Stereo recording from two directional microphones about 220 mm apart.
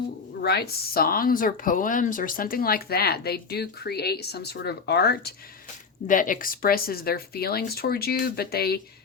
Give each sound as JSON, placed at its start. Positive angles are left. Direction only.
{"t": 0.4, "sound": "speech", "side_deg": 45}